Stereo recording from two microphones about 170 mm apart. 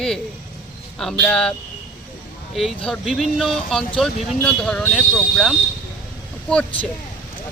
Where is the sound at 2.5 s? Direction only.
Centre (ahead or behind).